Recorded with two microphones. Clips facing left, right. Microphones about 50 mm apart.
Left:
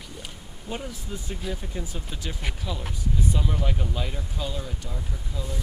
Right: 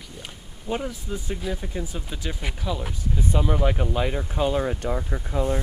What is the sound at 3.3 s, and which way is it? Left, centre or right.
Speech, right.